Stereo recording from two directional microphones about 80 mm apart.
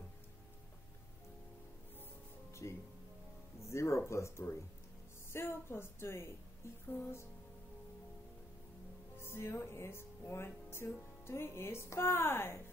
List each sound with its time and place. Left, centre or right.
2.5 s music: left
3.6 s speech: left
6.9 s music: left
9.2 s speech: left